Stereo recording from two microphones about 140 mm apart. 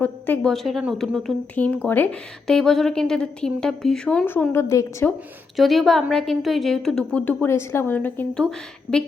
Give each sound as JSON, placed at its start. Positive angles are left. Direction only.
{"t": 0.0, "sound": "a woman's voice", "side_deg": 10}
{"t": 0.5, "sound": "a woman's voice", "side_deg": 0}
{"t": 4.5, "sound": "a woman's voice", "side_deg": 20}
{"t": 5.5, "sound": "a woman's voice", "side_deg": 0}